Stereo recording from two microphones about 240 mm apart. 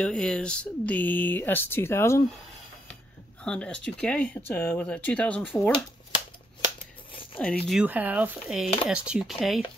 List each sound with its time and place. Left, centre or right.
0.0 s speech: centre
3.4 s speech: centre
7.3 s speech: centre